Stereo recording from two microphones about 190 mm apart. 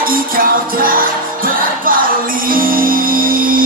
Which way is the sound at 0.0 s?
50° right (ahead or behind).